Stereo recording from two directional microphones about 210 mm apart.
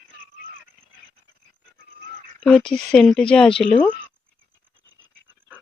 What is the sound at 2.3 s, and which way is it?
Speech, 5° left (ahead or behind).